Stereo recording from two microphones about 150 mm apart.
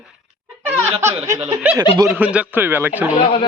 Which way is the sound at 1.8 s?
30° right (ahead or behind).